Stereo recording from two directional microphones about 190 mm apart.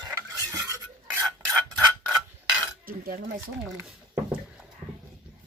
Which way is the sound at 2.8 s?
50° right (ahead or behind).